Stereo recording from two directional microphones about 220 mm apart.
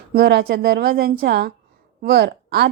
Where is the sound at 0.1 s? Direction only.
45° right (ahead or behind).